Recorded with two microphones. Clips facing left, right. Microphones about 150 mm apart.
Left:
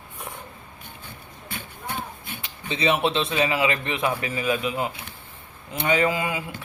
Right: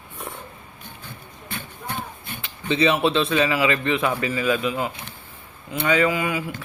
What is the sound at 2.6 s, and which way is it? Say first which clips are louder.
A man's voice: right 3 dB; 20° left (ahead or behind).